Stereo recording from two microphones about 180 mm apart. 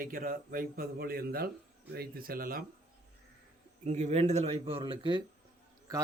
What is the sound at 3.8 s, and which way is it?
A man's voice, 40° right (ahead or behind).